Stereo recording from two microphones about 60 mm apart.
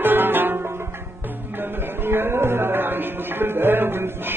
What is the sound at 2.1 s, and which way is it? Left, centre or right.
Music, right.